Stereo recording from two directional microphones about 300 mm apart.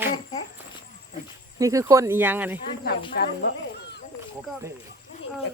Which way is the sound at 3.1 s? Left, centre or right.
Left.